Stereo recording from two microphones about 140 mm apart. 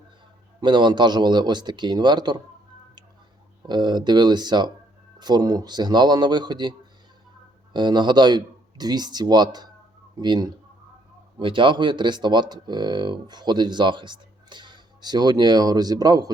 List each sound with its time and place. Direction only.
0.6 s speech: 30° right (ahead or behind)
3.7 s speech: 30° right (ahead or behind)